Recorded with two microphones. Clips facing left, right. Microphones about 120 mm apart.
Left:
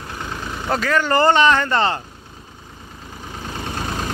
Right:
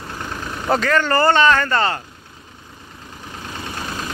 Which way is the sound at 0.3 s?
5° left (ahead or behind).